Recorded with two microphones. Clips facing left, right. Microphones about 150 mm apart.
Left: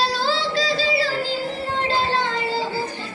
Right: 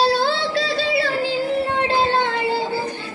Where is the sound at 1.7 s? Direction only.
60° right (ahead or behind).